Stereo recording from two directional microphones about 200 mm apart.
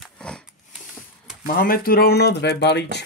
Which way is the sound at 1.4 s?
45° left (ahead or behind).